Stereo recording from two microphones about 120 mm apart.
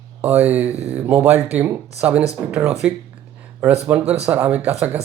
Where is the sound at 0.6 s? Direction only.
60° right (ahead or behind).